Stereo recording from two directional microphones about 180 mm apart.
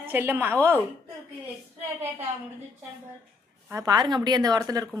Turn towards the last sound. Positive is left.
turn(degrees=-20)  # may be behind; listen again after turning